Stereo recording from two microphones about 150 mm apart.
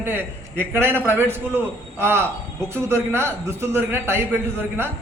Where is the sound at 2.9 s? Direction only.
15° right (ahead or behind).